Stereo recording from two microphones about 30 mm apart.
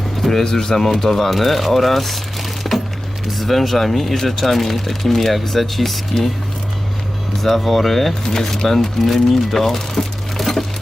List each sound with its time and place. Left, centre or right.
0.2 s a sound: centre
0.5 s speech: centre
2.6 s music: centre
3.3 s speech: centre
7.4 s speech: centre